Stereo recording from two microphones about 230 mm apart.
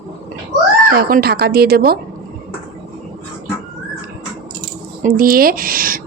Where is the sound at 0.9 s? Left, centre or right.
Right.